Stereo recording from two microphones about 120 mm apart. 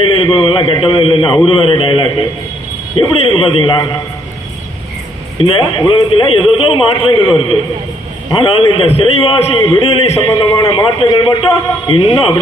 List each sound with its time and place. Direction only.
0.0 s a man's voice: 50° left (ahead or behind)
5.4 s a man's voice: 45° left (ahead or behind)